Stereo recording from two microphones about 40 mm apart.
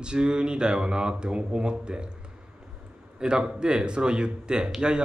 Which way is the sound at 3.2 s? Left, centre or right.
Right.